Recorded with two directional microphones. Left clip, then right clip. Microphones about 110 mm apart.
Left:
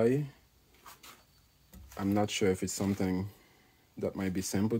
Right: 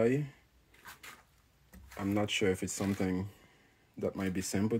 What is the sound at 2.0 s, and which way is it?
Speech, 25° left (ahead or behind).